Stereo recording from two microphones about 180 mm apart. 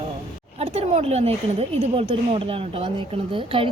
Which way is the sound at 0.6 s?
40° right (ahead or behind).